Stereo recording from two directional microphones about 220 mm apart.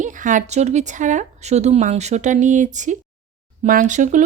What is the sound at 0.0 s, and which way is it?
Speech, 35° right (ahead or behind).